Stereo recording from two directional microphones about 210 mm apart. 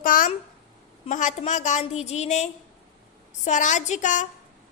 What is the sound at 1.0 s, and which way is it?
A woman's voice, 35° left (ahead or behind).